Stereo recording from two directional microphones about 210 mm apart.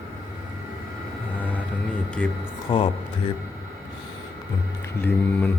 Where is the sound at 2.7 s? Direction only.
25° left (ahead or behind).